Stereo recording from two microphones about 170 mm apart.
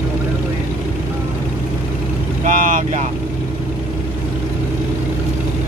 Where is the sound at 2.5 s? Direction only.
50° right (ahead or behind).